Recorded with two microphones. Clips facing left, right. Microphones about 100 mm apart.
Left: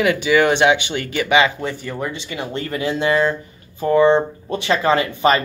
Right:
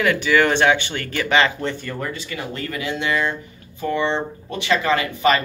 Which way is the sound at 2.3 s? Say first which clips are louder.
Left 3 dB; 25° left (ahead or behind).